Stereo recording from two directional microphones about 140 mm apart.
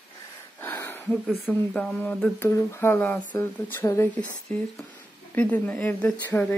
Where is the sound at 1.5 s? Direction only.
10° left (ahead or behind).